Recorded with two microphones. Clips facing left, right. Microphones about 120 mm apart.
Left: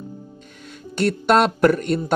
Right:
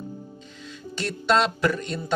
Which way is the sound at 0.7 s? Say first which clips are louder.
Left 10 dB; 60° left (ahead or behind).